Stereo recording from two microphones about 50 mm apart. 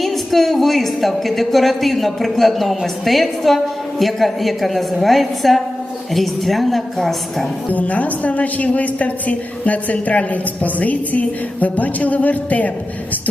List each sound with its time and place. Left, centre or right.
0.0 s speech: centre
7.7 s a woman's voice: left